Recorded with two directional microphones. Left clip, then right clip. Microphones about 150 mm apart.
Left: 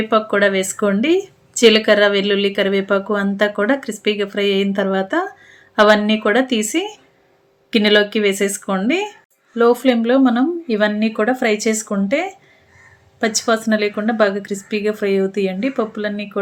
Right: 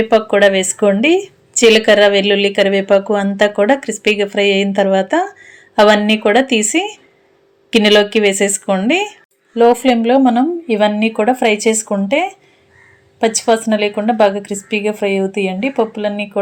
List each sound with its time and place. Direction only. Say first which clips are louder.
0.1 s a woman's voice: right 4 dB; 15° right (ahead or behind)